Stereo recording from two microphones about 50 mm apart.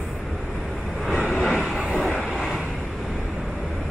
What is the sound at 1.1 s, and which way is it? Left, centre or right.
Vehicle, centre.